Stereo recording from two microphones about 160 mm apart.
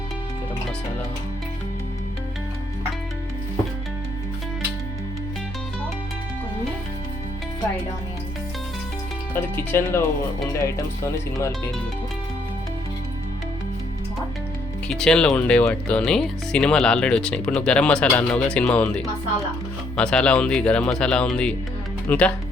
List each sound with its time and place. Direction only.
9.3 s speech: 15° left (ahead or behind)
14.8 s speech: 5° left (ahead or behind)